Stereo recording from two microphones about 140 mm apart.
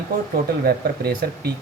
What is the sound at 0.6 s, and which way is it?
Speech, 90° right.